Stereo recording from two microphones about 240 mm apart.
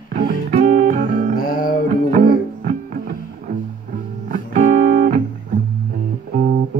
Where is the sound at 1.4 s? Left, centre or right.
Left.